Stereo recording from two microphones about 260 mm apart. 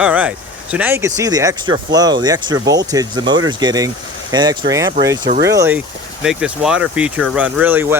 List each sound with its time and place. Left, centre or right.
0.0 s speech: centre